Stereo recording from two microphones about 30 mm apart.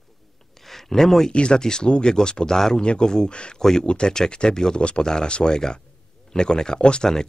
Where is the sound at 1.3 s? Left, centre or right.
Left.